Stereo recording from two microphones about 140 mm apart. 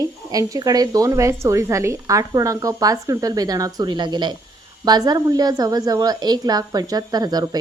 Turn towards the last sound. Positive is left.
turn(degrees=-30)  # may be behind; listen again after turning